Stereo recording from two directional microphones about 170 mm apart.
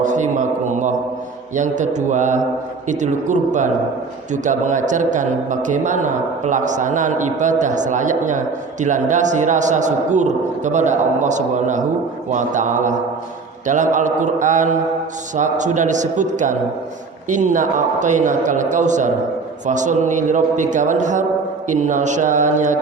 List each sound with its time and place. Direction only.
0.0 s speech: 45° right (ahead or behind)